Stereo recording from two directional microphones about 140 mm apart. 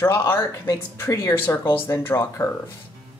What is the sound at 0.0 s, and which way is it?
Speech, 15° left (ahead or behind).